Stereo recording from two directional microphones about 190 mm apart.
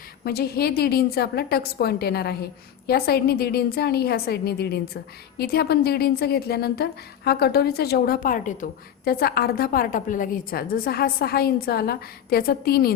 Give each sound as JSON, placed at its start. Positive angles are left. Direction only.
{"t": 0.3, "sound": "a woman's voice", "side_deg": 55}